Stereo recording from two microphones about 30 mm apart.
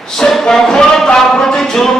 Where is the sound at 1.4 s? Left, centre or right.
Left.